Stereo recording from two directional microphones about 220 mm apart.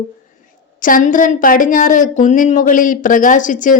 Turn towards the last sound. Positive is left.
turn(degrees=35)  # may be behind; listen again after turning